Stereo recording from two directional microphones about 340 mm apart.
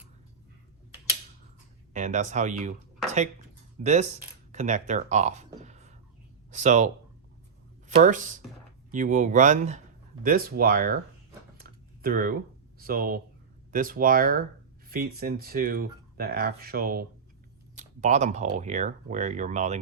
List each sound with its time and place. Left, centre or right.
1.9 s speech: right
3.0 s a sound: centre
3.8 s speech: centre
11.6 s typing: right
12.8 s speech: right